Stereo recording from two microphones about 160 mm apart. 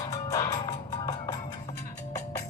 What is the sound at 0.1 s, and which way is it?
Music, 20° left (ahead or behind).